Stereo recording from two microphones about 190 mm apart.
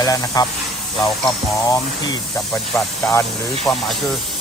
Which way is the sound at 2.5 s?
Centre (ahead or behind).